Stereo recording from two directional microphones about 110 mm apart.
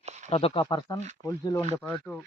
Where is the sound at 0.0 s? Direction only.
90° right.